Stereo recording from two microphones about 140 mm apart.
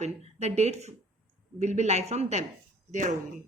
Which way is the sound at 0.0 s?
50° right (ahead or behind).